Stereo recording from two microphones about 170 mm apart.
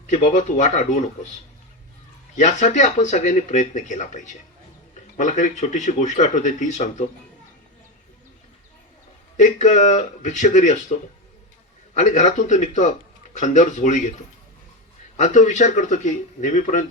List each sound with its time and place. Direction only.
0.1 s speech: 45° left (ahead or behind)
2.4 s speech: 45° left (ahead or behind)
9.4 s speech: 45° left (ahead or behind)
11.9 s speech: 45° left (ahead or behind)
15.1 s speech: 45° left (ahead or behind)